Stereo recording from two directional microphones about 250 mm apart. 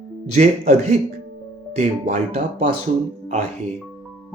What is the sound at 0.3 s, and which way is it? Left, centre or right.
Speech, right.